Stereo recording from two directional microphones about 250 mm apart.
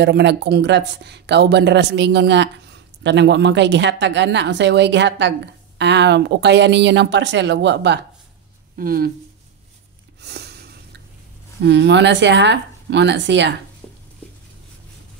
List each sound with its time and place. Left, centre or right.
0.0 s speech: right
10.2 s a sound: right
11.6 s speech: right